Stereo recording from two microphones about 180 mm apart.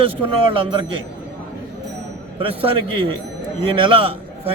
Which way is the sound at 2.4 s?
30° right (ahead or behind).